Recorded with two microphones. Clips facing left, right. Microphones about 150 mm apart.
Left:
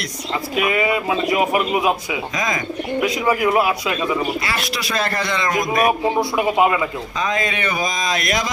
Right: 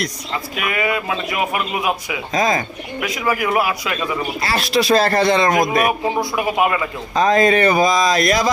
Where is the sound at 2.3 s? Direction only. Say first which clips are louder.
Right 8 dB; 35° right (ahead or behind).